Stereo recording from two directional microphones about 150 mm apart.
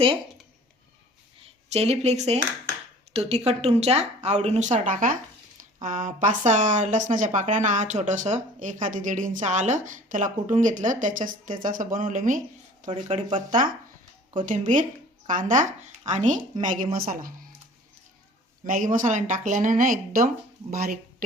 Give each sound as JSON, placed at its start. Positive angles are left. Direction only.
{"t": 1.4, "sound": "speech", "side_deg": -45}
{"t": 18.6, "sound": "speech", "side_deg": -60}